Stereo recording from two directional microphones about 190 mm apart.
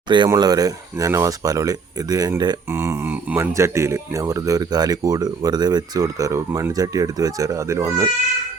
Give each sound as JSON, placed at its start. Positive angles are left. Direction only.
{"t": 0.1, "sound": "speech", "side_deg": -20}